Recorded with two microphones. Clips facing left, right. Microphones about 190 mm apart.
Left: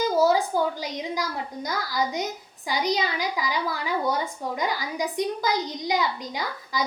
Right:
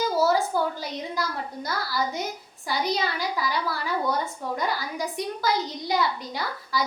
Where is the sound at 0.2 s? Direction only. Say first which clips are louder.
Left 2 dB; 15° left (ahead or behind).